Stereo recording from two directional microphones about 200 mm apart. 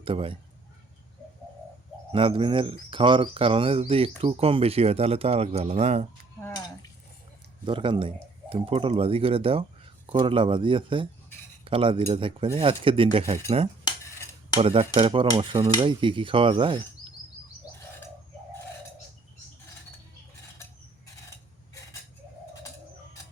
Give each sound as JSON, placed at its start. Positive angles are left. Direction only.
{"t": 0.0, "sound": "a man's voice", "side_deg": -25}
{"t": 2.1, "sound": "a man's voice", "side_deg": -25}
{"t": 7.6, "sound": "a man's voice", "side_deg": -25}
{"t": 14.5, "sound": "a man's voice", "side_deg": -30}